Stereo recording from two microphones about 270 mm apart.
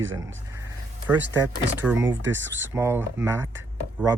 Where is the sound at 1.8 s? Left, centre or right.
Centre.